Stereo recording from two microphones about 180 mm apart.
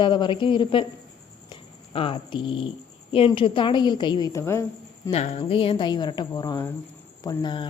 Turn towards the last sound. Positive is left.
turn(degrees=25)  # may be behind; listen again after turning